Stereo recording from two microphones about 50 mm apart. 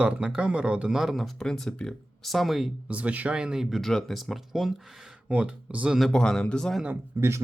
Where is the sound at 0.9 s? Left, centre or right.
Centre.